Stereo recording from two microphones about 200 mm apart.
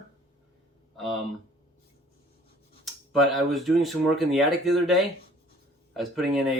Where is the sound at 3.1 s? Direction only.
Centre (ahead or behind).